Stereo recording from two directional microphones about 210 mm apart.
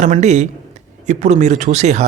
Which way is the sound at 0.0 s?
35° right (ahead or behind).